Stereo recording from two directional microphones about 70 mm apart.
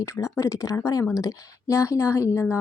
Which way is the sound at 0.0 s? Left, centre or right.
Left.